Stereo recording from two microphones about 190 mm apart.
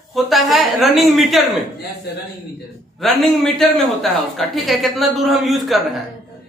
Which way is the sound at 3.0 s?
Centre (ahead or behind).